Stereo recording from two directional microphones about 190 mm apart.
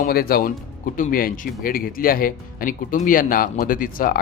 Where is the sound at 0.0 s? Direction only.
50° left (ahead or behind).